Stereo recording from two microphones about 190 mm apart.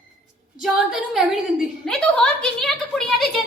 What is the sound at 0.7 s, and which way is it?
Speech, centre (ahead or behind).